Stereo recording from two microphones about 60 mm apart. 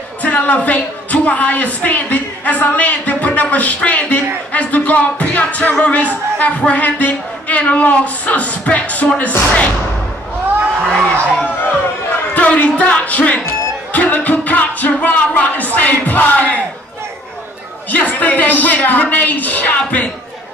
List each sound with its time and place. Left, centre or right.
0.2 s speech: left
10.9 s a sound: centre
12.4 s speech: left
17.9 s speech: left